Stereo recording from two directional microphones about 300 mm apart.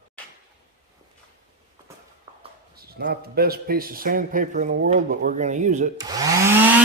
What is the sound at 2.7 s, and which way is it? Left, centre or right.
Speech, right.